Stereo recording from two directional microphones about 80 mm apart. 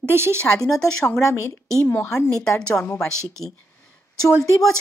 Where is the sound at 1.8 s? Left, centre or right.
Left.